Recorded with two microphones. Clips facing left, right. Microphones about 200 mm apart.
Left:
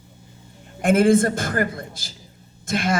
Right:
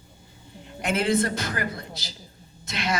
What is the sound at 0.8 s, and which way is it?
A woman's voice, 50° left (ahead or behind).